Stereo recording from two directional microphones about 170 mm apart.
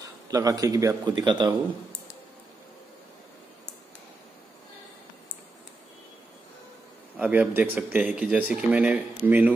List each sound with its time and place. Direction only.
0.3 s a man's voice: 20° right (ahead or behind)
7.2 s speech: 10° right (ahead or behind)